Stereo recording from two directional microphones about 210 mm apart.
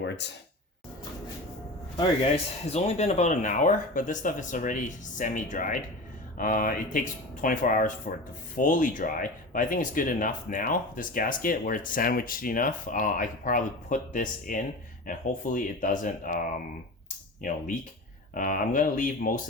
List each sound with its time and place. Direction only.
0.0 s speech: 55° left (ahead or behind)
2.0 s speech: 30° left (ahead or behind)
18.3 s speech: 40° left (ahead or behind)